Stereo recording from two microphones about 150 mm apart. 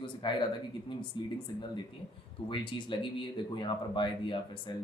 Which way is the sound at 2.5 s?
30° left (ahead or behind).